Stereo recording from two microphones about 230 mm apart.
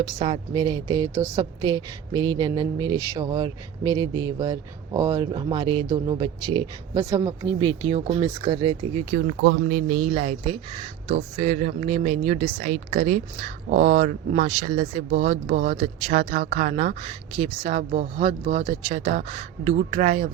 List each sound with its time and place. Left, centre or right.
0.2 s a woman's voice: right
9.6 s speech: right